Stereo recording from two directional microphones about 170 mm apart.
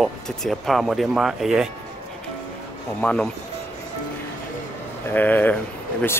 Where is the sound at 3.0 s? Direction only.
5° left (ahead or behind).